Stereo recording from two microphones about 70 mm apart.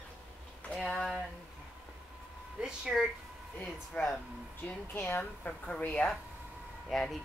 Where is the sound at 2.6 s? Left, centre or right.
Centre.